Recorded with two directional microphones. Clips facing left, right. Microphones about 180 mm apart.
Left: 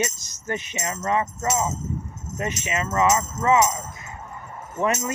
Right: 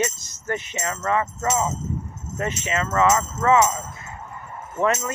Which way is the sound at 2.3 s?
15° left (ahead or behind).